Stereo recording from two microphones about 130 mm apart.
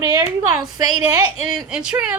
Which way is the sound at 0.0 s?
30° right (ahead or behind).